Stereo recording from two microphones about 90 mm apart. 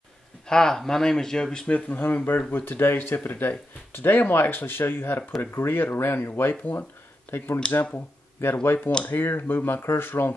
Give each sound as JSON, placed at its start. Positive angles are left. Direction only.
{"t": 0.5, "sound": "speech", "side_deg": 5}